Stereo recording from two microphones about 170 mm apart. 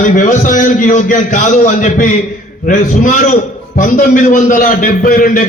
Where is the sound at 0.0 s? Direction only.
50° left (ahead or behind).